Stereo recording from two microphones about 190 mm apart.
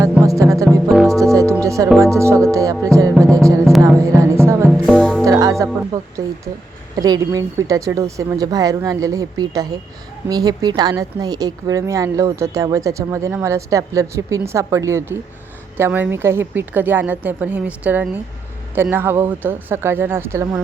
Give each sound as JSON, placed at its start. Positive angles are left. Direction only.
{"t": 0.3, "sound": "speech", "side_deg": -15}
{"t": 1.2, "sound": "music", "side_deg": -15}
{"t": 2.0, "sound": "speech", "side_deg": -15}
{"t": 3.3, "sound": "music", "side_deg": -20}
{"t": 4.7, "sound": "music", "side_deg": 0}
{"t": 5.2, "sound": "music", "side_deg": -20}
{"t": 6.9, "sound": "speech", "side_deg": -20}